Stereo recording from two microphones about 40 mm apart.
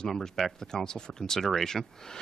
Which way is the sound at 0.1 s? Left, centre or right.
Centre.